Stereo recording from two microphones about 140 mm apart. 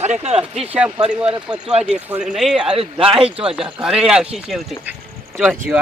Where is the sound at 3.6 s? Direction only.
5° right (ahead or behind).